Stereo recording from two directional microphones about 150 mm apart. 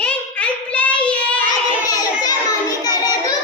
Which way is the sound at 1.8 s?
25° left (ahead or behind).